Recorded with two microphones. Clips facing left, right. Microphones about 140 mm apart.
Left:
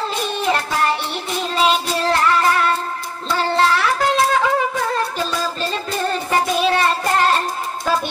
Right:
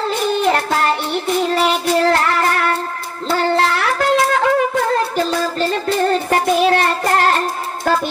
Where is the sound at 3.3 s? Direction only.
55° right (ahead or behind).